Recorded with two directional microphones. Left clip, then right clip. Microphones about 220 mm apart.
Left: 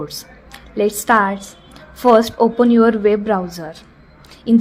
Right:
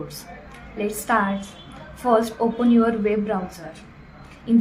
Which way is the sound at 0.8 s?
45° left (ahead or behind).